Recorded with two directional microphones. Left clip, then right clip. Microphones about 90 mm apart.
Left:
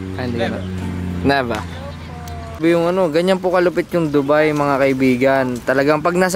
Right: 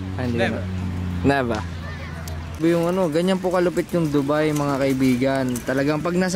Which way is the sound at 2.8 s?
10° left (ahead or behind).